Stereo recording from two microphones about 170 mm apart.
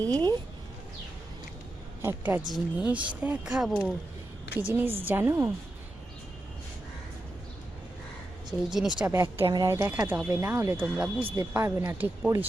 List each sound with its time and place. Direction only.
0.0 s speech: 10° left (ahead or behind)
2.0 s a woman's voice: 15° right (ahead or behind)
8.7 s speech: centre (ahead or behind)
9.4 s speech: 25° right (ahead or behind)